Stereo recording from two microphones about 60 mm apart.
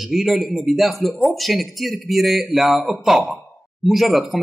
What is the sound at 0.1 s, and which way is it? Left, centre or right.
Speech, centre.